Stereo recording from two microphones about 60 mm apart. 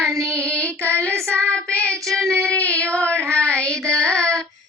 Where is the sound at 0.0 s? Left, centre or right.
Right.